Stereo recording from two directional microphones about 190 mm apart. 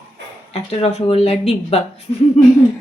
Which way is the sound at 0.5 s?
35° left (ahead or behind).